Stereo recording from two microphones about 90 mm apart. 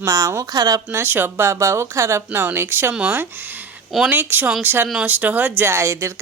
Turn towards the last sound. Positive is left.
turn(degrees=-30)  # may be behind; listen again after turning